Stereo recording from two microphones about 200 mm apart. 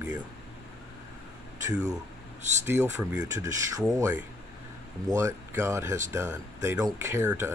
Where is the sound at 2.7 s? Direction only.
15° right (ahead or behind).